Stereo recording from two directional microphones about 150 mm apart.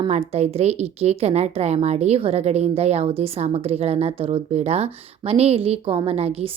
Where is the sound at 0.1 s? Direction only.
45° right (ahead or behind).